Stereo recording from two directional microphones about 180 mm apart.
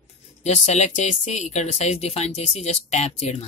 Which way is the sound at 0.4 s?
40° left (ahead or behind).